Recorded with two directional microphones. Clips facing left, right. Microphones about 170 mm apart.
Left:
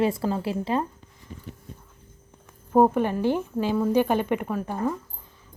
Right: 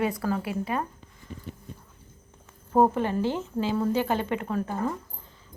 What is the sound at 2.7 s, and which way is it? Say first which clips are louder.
A woman's voice: left 3 dB; 10° left (ahead or behind).